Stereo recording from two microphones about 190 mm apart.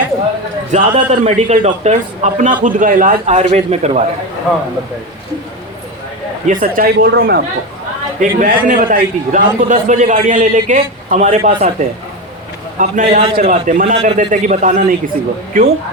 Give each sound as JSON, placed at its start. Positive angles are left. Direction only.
{"t": 0.7, "sound": "a man's voice", "side_deg": -35}
{"t": 6.5, "sound": "speech", "side_deg": -45}
{"t": 8.2, "sound": "a man's voice", "side_deg": -45}
{"t": 12.8, "sound": "a man's voice", "side_deg": -40}